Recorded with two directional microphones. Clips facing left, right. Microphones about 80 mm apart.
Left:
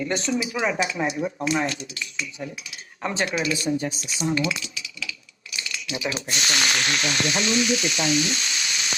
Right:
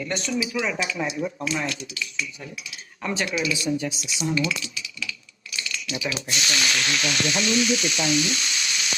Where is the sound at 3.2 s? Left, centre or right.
Left.